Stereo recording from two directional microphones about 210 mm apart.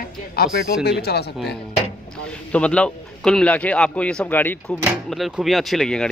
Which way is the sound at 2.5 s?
5° left (ahead or behind).